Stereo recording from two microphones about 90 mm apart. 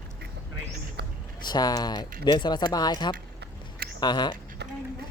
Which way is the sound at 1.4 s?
50° left (ahead or behind).